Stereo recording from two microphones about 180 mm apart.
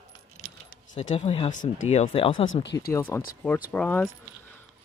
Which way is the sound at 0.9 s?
35° left (ahead or behind).